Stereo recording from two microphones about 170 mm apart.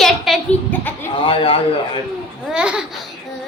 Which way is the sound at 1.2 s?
30° left (ahead or behind).